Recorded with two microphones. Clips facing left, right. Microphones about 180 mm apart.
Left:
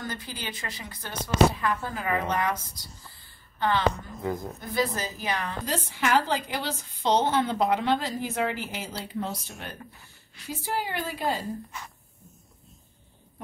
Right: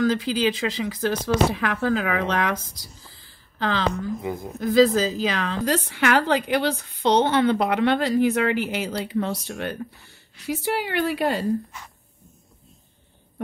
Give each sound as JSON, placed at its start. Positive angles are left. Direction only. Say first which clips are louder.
{"t": 0.0, "sound": "speech", "louder": "right 15 dB", "side_deg": -90}
{"t": 4.2, "sound": "a woman's voice", "louder": "right 1 dB", "side_deg": -10}
{"t": 4.6, "sound": "a woman's voice", "louder": "right 16 dB", "side_deg": -90}